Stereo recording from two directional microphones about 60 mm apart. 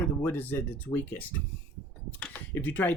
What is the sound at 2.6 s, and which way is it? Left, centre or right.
Speech, left.